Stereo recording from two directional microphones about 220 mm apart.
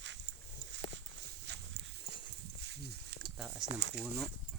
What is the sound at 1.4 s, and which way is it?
Walk, 50° right (ahead or behind).